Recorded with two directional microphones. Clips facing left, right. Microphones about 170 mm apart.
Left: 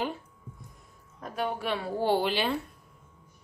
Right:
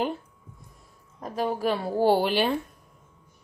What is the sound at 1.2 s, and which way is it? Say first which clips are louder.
A woman's voice: right 5 dB; 35° right (ahead or behind).